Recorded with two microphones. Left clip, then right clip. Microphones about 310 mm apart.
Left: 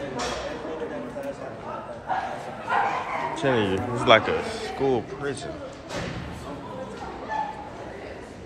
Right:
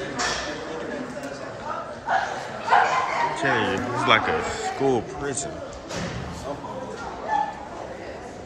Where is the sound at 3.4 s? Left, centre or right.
Centre.